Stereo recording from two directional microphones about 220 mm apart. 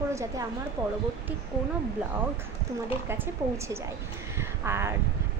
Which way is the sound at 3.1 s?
10° right (ahead or behind).